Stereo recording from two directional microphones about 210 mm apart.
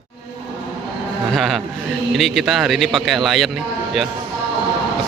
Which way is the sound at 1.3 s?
Centre (ahead or behind).